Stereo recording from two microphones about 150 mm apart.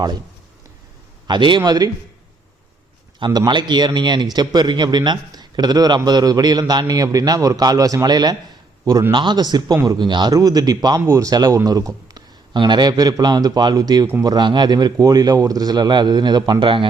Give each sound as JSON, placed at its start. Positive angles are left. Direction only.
{"t": 1.3, "sound": "a man's voice", "side_deg": -30}
{"t": 3.2, "sound": "a man's voice", "side_deg": -30}